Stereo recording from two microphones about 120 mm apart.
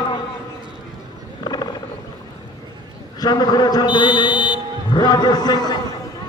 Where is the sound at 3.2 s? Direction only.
35° left (ahead or behind).